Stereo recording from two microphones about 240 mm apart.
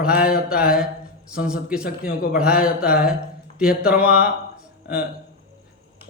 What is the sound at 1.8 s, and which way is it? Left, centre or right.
Speech, left.